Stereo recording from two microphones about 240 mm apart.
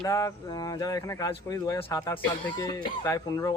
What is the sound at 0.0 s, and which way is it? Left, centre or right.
Speech, centre.